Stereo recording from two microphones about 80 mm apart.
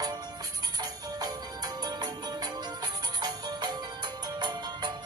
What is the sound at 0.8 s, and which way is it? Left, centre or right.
Music, right.